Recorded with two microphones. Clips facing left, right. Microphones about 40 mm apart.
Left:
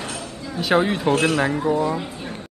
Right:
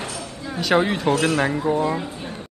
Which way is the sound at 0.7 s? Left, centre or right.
Centre.